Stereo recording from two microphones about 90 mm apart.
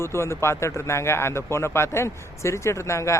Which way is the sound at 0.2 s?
30° left (ahead or behind).